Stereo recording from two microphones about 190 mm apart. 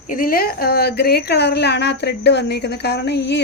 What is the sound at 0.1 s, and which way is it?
A woman's voice, 45° left (ahead or behind).